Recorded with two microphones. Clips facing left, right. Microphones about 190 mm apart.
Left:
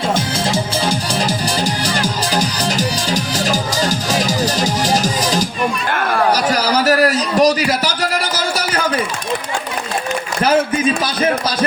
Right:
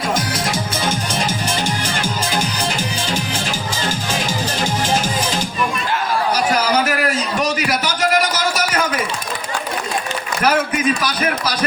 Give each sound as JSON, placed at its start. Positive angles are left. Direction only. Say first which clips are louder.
{"t": 0.1, "sound": "music", "louder": "left 1 dB", "side_deg": 30}
{"t": 6.3, "sound": "a sound", "louder": "left 1 dB", "side_deg": 35}
{"t": 10.4, "sound": "speech", "louder": "left 2 dB", "side_deg": 30}